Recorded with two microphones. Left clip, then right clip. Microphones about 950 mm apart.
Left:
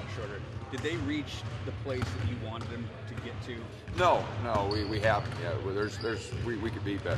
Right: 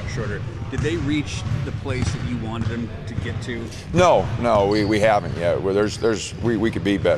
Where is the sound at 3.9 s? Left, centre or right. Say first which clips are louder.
Right 10 dB; right.